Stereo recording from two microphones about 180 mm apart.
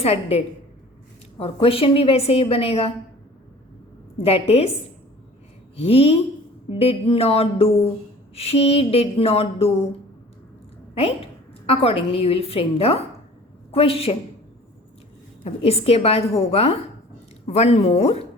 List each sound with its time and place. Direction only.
0.0 s a woman's voice: 35° left (ahead or behind)
4.2 s a woman's voice: 35° left (ahead or behind)
5.7 s a woman's voice: 35° left (ahead or behind)
11.6 s a woman's voice: 35° left (ahead or behind)
15.4 s a woman's voice: 35° left (ahead or behind)